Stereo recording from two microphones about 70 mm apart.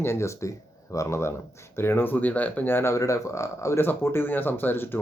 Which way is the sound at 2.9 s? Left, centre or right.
Left.